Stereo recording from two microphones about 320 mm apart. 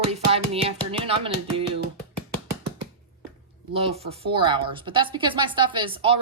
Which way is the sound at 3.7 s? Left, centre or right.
Centre.